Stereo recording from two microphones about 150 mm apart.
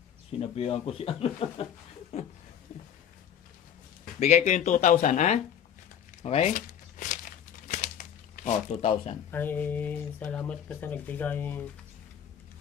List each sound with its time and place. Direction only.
0.3 s speech: 40° left (ahead or behind)
4.2 s speech: 50° left (ahead or behind)
7.0 s crumpling: 60° left (ahead or behind)
8.8 s speech: 45° left (ahead or behind)
9.3 s speech: 10° left (ahead or behind)